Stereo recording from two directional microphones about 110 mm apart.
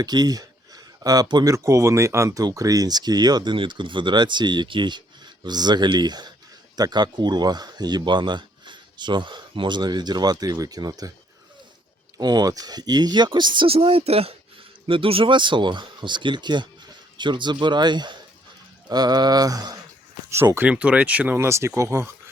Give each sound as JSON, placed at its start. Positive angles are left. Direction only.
{"t": 0.0, "sound": "speech", "side_deg": -40}
{"t": 12.1, "sound": "speech", "side_deg": -40}
{"t": 20.3, "sound": "speech", "side_deg": -25}
{"t": 20.7, "sound": "speech", "side_deg": -10}
{"t": 21.3, "sound": "speech", "side_deg": -25}